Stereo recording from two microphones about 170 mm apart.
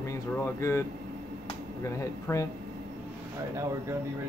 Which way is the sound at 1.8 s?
15° left (ahead or behind).